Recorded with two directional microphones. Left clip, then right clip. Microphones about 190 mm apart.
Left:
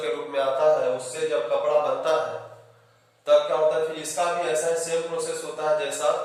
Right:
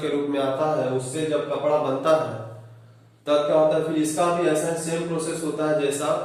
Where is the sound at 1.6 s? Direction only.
Centre (ahead or behind).